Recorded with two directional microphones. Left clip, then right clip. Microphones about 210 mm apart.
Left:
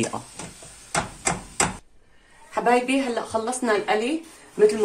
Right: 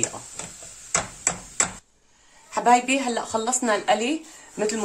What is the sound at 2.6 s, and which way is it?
Speech, 55° right (ahead or behind).